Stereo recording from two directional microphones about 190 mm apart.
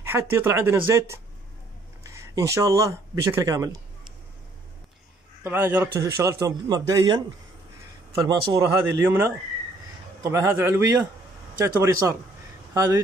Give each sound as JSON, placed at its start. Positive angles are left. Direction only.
{"t": 0.0, "sound": "a man's voice", "side_deg": -10}
{"t": 5.4, "sound": "a man's voice", "side_deg": -10}
{"t": 8.2, "sound": "a man's voice", "side_deg": -15}